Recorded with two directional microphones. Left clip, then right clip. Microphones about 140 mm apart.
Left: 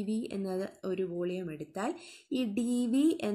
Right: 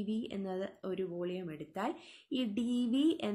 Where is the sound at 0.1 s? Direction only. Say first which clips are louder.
Left 4 dB; 40° left (ahead or behind).